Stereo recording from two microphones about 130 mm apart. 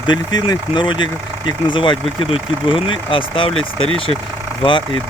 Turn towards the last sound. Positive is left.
turn(degrees=40)  # may be behind; listen again after turning